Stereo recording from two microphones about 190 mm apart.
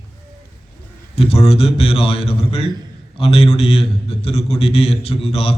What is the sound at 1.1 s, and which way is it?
A man's voice, 30° left (ahead or behind).